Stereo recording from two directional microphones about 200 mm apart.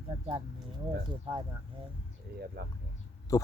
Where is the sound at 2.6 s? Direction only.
55° right (ahead or behind).